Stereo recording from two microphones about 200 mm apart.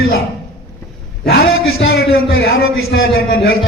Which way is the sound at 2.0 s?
50° left (ahead or behind).